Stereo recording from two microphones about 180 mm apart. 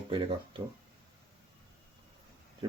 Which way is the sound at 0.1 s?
30° right (ahead or behind).